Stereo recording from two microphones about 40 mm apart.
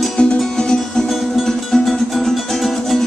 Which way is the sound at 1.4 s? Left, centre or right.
Centre.